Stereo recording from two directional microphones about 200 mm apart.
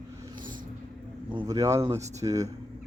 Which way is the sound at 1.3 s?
20° right (ahead or behind).